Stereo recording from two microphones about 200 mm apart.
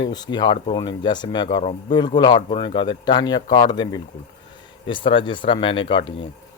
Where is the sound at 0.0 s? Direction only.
20° left (ahead or behind).